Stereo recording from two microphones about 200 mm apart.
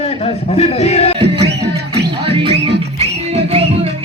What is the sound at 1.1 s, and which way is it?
Music, 25° right (ahead or behind).